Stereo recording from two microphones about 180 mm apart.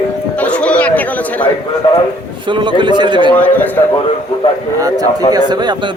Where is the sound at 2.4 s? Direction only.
25° right (ahead or behind).